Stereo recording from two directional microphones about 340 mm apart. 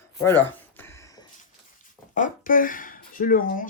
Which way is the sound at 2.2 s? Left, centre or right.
Left.